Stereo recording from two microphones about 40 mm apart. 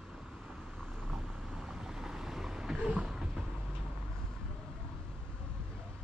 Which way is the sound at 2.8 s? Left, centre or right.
Right.